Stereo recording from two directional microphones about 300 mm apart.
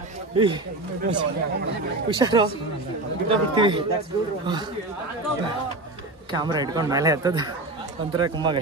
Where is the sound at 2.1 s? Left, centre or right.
Centre.